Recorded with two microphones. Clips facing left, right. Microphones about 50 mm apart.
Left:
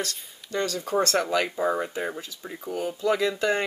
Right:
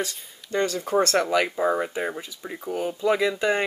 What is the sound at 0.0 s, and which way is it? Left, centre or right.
Speech, centre.